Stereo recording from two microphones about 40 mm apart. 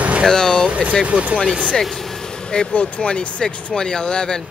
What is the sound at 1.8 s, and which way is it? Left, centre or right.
Vehicle, centre.